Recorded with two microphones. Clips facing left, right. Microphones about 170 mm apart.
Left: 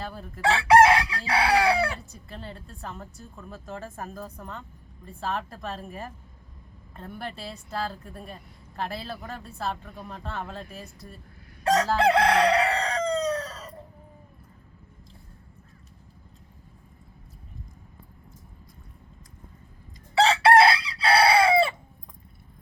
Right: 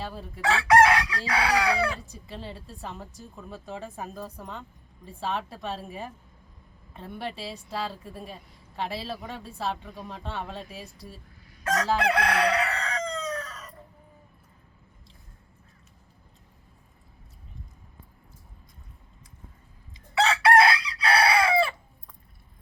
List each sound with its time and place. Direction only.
0.0 s a woman's voice: centre (ahead or behind)
0.4 s chicken: 30° left (ahead or behind)
2.1 s a woman's voice: centre (ahead or behind)
11.6 s crowing: 30° left (ahead or behind)
11.9 s chicken: 30° left (ahead or behind)
20.1 s chicken: 30° left (ahead or behind)